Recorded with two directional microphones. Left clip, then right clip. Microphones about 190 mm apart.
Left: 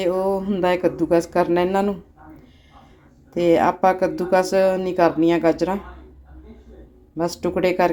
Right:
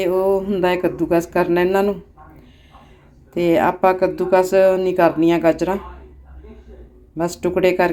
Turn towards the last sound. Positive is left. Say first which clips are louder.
# right 3 dB
turn(degrees=0)  # may be behind; listen again after turning